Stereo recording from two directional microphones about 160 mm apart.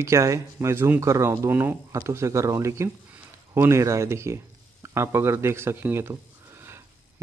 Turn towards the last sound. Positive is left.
turn(degrees=-15)  # may be behind; listen again after turning